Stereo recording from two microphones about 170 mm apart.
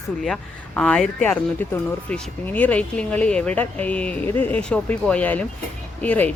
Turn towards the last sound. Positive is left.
turn(degrees=10)  # may be behind; listen again after turning